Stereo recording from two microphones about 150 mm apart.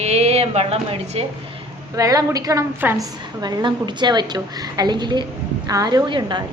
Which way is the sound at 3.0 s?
25° right (ahead or behind).